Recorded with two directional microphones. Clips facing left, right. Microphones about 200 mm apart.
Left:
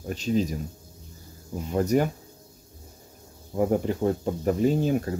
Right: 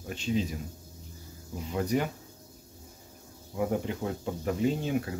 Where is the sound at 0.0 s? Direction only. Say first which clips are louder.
Left 5 dB; 40° left (ahead or behind).